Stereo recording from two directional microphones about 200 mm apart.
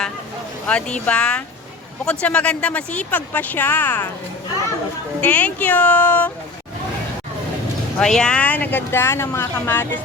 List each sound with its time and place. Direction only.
0.7 s speech: 5° left (ahead or behind)
5.2 s speech: 5° left (ahead or behind)
7.9 s speech: 5° left (ahead or behind)